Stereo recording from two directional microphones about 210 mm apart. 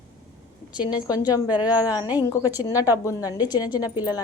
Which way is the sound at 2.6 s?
15° left (ahead or behind).